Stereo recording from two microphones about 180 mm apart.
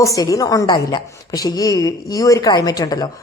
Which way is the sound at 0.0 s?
20° left (ahead or behind).